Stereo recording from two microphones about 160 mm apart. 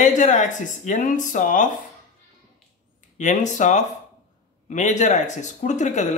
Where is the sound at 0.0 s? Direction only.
50° left (ahead or behind).